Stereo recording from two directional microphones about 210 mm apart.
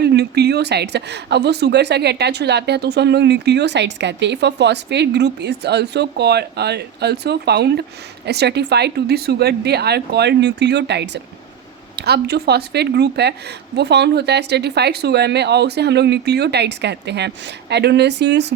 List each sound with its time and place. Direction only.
0.0 s speech: 50° right (ahead or behind)